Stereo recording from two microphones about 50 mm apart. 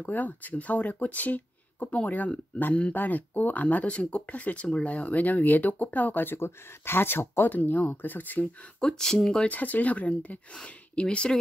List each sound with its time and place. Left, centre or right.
0.0 s speech: left
7.5 s speech: left
8.8 s speech: centre
9.5 s speech: left